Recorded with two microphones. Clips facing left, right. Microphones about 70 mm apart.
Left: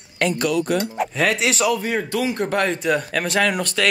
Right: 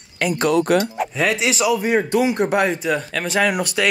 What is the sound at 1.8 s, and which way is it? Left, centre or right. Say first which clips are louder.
Speech: right 5 dB; right.